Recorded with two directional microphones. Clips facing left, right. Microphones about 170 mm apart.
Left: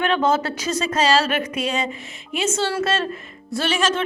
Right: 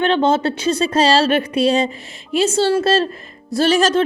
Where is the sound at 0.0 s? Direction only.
30° right (ahead or behind).